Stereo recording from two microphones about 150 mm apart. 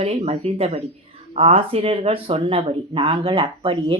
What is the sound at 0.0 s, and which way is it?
Speech, 45° right (ahead or behind).